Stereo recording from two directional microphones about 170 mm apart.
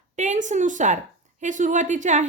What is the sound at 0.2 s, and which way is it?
A woman's voice, 45° right (ahead or behind).